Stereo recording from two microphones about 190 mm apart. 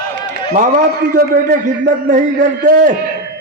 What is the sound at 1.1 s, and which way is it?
A man's voice, 45° right (ahead or behind).